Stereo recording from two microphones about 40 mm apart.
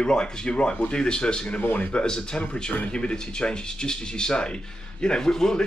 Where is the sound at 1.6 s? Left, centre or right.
Left.